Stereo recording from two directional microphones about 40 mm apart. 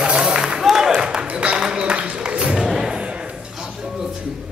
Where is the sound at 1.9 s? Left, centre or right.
Right.